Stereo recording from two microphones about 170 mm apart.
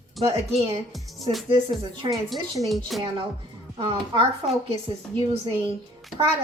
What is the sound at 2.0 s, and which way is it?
Music, centre (ahead or behind).